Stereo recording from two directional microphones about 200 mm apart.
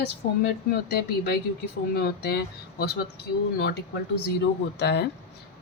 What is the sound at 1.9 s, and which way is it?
A woman's voice, 55° left (ahead or behind).